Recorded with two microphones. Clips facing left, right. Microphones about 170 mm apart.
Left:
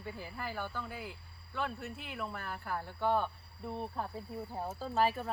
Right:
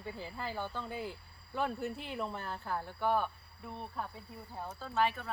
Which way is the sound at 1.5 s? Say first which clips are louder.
Right 3 dB; 35° right (ahead or behind).